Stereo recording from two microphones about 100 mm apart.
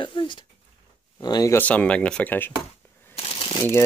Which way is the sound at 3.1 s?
70° left (ahead or behind).